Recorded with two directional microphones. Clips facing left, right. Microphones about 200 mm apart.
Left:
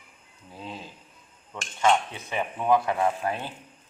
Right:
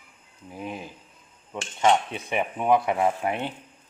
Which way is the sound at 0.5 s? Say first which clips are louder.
Right 4 dB; 15° right (ahead or behind).